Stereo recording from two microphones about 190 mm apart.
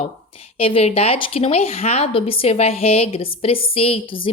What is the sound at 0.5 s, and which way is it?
A woman's voice, 30° left (ahead or behind).